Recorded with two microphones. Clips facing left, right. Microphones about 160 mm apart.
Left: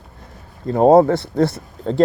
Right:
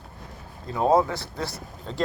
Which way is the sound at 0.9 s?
55° left (ahead or behind).